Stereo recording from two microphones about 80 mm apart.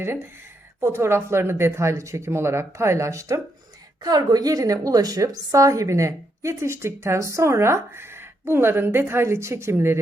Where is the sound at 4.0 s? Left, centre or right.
Right.